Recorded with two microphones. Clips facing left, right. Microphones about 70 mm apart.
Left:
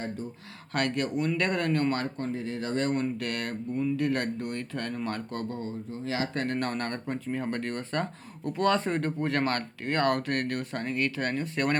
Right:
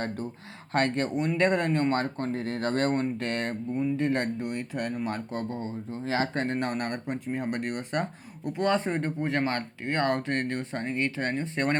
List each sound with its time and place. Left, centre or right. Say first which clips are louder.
0.7 s speech: right 2 dB; right
6.1 s speech: right 2 dB; right